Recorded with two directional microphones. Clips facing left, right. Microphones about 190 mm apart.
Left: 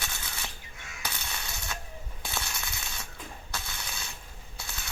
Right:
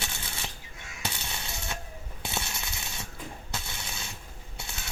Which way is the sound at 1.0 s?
25° right (ahead or behind).